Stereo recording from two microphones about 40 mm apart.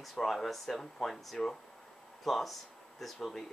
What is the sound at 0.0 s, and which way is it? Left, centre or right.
Speech, centre.